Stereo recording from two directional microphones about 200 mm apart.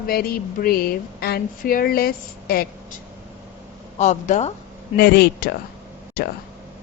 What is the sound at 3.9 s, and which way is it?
Speech, 35° left (ahead or behind).